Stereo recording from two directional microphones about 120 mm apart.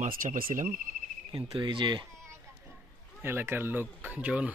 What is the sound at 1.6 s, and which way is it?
Speech, 40° right (ahead or behind).